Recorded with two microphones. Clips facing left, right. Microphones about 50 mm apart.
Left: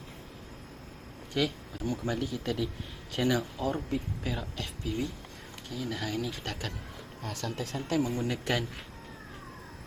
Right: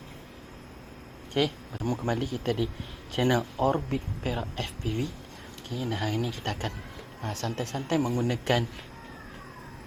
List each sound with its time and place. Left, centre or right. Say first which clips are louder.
1.3 s speech: right 3 dB; right
7.8 s speech: right 3 dB; right